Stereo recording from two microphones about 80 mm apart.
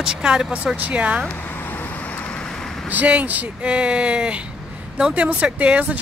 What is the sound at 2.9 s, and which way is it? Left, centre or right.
A woman's voice, centre.